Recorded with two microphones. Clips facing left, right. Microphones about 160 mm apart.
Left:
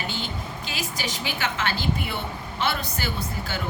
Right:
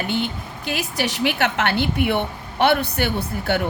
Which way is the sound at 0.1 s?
60° right (ahead or behind).